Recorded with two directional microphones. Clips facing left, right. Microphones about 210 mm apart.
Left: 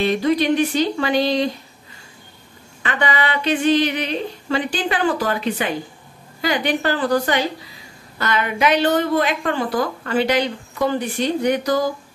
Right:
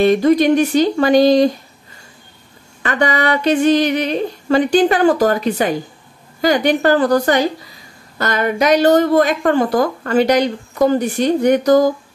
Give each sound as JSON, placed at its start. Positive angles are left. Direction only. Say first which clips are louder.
{"t": 0.0, "sound": "a woman's voice", "louder": "right 6 dB", "side_deg": -45}
{"t": 2.8, "sound": "a woman's voice", "louder": "right 5 dB", "side_deg": -45}